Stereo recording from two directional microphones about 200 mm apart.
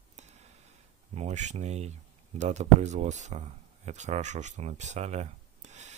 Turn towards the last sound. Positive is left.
turn(degrees=-35)  # may be behind; listen again after turning